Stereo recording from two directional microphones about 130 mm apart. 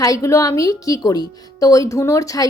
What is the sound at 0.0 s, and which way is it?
A woman's voice, 25° left (ahead or behind).